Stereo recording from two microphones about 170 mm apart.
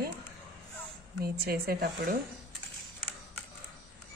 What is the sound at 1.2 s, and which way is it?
Speech, 65° right (ahead or behind).